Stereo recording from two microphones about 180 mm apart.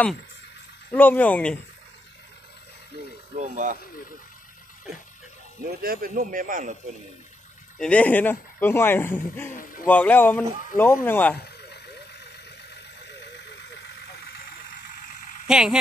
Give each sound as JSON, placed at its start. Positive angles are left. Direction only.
{"t": 0.9, "sound": "speech", "side_deg": 10}
{"t": 3.3, "sound": "speech", "side_deg": -45}
{"t": 5.7, "sound": "a man's voice", "side_deg": -55}
{"t": 7.8, "sound": "speech", "side_deg": 5}
{"t": 9.5, "sound": "speech", "side_deg": 50}
{"t": 9.8, "sound": "speech", "side_deg": 10}
{"t": 11.3, "sound": "vehicle", "side_deg": 65}
{"t": 15.4, "sound": "speech", "side_deg": -5}